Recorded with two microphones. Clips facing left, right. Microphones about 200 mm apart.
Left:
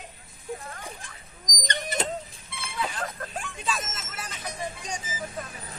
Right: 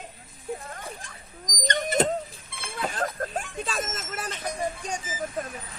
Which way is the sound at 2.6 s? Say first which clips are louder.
Right 3 dB; 50° right (ahead or behind).